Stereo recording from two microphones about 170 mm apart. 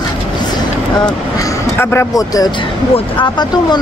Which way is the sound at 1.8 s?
15° left (ahead or behind).